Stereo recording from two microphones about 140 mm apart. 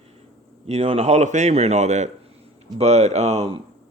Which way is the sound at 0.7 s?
45° right (ahead or behind).